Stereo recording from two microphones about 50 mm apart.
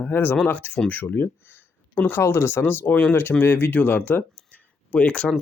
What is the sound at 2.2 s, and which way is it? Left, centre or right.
Speech, left.